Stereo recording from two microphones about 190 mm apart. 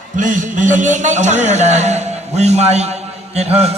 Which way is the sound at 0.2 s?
40° right (ahead or behind).